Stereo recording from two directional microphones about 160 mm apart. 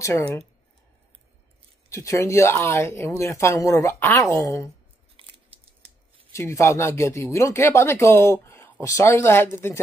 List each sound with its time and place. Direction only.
1.9 s speech: 20° left (ahead or behind)
6.3 s speech: 20° left (ahead or behind)